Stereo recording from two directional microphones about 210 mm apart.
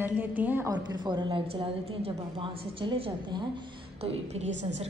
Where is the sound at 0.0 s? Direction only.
10° right (ahead or behind).